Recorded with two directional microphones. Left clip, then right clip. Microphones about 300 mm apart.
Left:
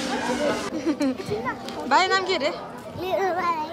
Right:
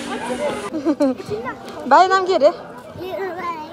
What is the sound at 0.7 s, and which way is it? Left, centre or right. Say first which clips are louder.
A child's voice: right 6 dB; centre.